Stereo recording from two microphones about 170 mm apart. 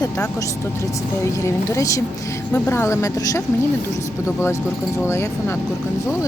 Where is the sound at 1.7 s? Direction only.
20° left (ahead or behind).